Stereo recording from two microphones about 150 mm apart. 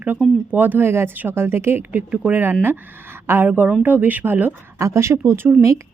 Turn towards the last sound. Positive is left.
turn(degrees=-20)  # may be behind; listen again after turning